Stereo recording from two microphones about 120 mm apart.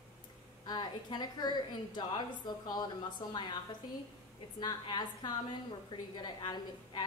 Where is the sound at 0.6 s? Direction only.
35° left (ahead or behind).